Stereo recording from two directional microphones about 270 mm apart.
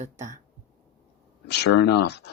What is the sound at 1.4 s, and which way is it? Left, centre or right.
Speech, left.